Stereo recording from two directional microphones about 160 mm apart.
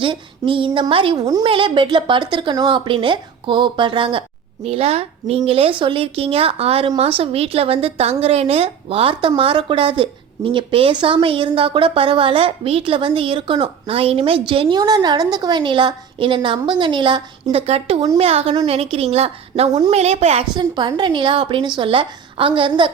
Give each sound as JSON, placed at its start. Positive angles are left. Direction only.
{"t": 0.0, "sound": "a woman's voice", "side_deg": -30}
{"t": 17.7, "sound": "a woman's voice", "side_deg": -40}
{"t": 20.6, "sound": "a woman's voice", "side_deg": -30}